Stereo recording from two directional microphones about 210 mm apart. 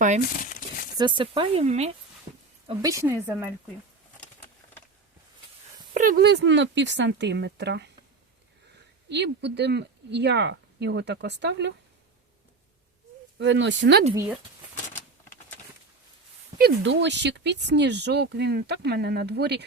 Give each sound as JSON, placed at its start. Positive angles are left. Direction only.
{"t": 0.9, "sound": "speech", "side_deg": -20}
{"t": 2.6, "sound": "a woman's voice", "side_deg": -15}
{"t": 5.9, "sound": "speech", "side_deg": -40}
{"t": 9.0, "sound": "speech", "side_deg": -55}
{"t": 13.4, "sound": "speech", "side_deg": -60}
{"t": 16.6, "sound": "speech", "side_deg": -55}